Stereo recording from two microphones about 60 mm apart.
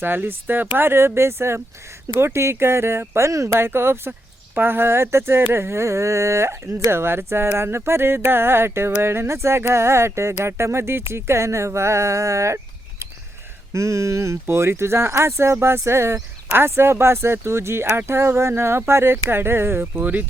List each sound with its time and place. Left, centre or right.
0.0 s speech: right
3.7 s speech: right
13.7 s speech: right
14.4 s speech: right
19.9 s speech: right